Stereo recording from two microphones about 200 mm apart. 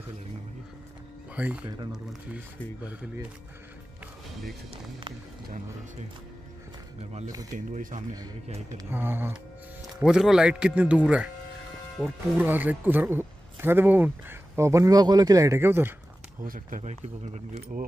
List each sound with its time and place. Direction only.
1.3 s speech: 5° right (ahead or behind)
7.5 s speech: 40° right (ahead or behind)
8.7 s speech: 10° right (ahead or behind)
16.4 s speech: 45° right (ahead or behind)